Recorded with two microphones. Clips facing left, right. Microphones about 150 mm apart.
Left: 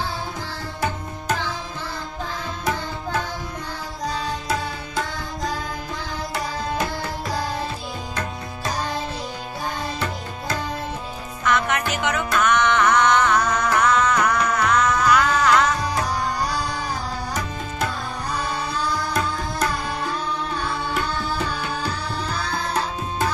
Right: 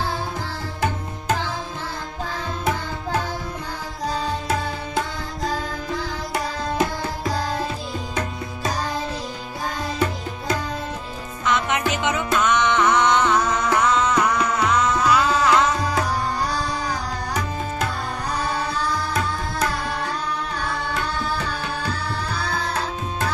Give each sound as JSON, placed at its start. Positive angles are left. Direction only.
{"t": 11.4, "sound": "music", "side_deg": -20}